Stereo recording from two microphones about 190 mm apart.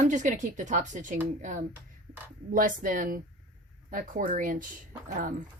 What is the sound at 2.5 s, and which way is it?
Speech, 45° right (ahead or behind).